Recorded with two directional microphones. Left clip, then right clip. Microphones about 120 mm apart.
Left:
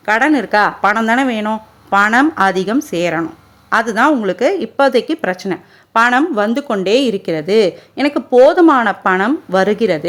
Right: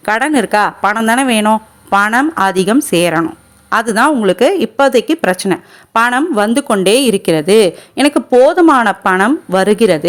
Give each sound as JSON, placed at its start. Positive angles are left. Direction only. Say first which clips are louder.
{"t": 0.0, "sound": "a woman's voice", "louder": "even", "side_deg": -35}